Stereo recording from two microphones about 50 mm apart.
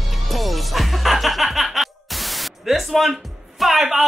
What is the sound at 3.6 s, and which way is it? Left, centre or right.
Speech, centre.